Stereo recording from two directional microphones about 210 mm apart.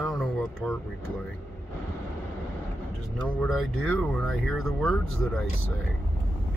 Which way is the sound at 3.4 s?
Centre (ahead or behind).